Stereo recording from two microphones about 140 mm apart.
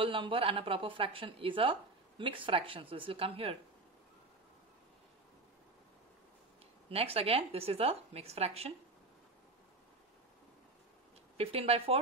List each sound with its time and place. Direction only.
0.0 s a woman's voice: 40° right (ahead or behind)
6.9 s a woman's voice: 45° right (ahead or behind)
11.3 s a woman's voice: 45° right (ahead or behind)